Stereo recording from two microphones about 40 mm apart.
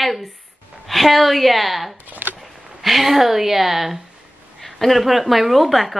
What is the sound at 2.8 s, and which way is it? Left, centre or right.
Speech, centre.